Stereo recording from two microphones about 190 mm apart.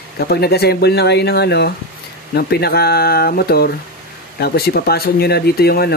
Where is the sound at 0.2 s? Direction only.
55° left (ahead or behind).